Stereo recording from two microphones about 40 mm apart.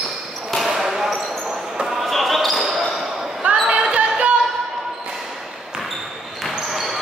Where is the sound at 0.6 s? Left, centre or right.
Centre.